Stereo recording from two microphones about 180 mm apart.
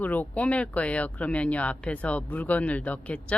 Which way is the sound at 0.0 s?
10° left (ahead or behind).